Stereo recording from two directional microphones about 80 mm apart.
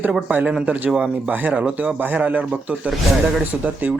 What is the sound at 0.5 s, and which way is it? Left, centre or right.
Speech, centre.